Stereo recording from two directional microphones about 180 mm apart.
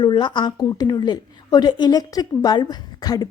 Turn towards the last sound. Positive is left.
turn(degrees=20)  # may be behind; listen again after turning